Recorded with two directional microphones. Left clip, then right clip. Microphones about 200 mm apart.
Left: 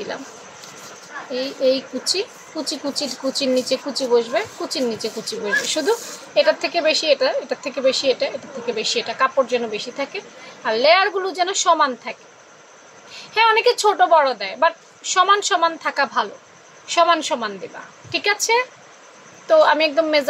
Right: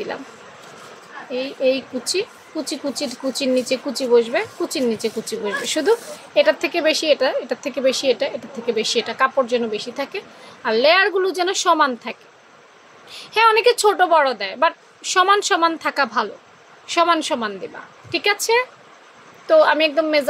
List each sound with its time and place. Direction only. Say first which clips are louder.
1.3 s a child's voice: even; 15° right (ahead or behind)